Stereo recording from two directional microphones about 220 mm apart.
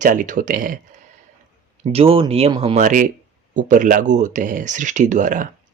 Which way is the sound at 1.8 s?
25° right (ahead or behind).